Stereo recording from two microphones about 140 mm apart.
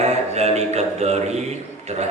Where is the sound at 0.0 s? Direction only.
50° right (ahead or behind).